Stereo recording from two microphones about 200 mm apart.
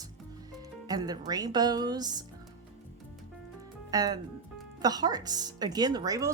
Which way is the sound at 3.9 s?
20° right (ahead or behind).